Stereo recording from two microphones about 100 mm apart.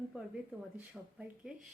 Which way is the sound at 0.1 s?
10° right (ahead or behind).